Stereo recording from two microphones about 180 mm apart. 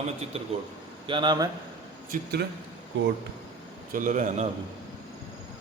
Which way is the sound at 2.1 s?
50° right (ahead or behind).